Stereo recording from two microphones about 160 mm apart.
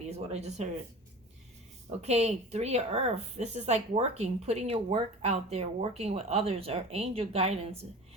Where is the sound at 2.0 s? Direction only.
45° right (ahead or behind).